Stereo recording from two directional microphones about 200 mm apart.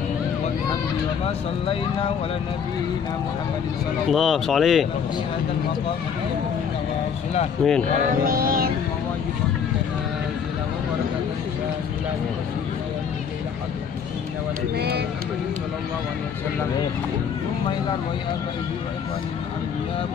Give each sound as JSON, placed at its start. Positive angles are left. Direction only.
{"t": 1.2, "sound": "speech", "side_deg": 25}
{"t": 4.1, "sound": "speech", "side_deg": 0}
{"t": 7.6, "sound": "speech", "side_deg": 0}
{"t": 8.3, "sound": "music", "side_deg": -45}
{"t": 14.8, "sound": "speech", "side_deg": -55}